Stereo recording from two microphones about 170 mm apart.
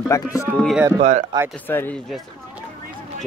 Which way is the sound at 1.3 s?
25° right (ahead or behind).